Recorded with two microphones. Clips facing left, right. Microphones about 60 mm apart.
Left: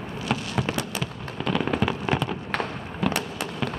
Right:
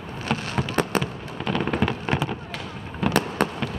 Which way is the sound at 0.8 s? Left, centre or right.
Right.